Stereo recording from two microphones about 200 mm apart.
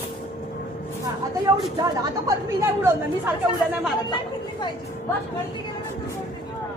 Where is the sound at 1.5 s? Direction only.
20° right (ahead or behind).